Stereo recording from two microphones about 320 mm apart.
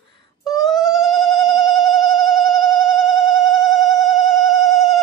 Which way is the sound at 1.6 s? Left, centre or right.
Centre.